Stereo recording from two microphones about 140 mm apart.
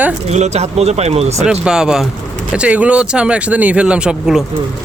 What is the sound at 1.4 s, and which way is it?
Speech, 5° right (ahead or behind).